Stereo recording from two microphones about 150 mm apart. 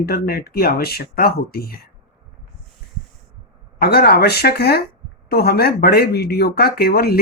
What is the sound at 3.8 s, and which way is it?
Speech, 90° left.